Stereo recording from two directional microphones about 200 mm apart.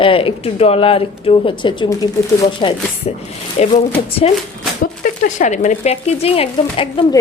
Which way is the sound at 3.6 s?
30° left (ahead or behind).